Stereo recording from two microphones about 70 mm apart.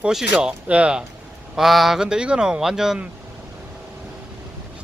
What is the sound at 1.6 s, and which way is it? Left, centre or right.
Speech, centre.